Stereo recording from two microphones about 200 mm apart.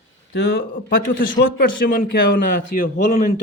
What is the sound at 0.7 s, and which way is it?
A man's voice, 45° left (ahead or behind).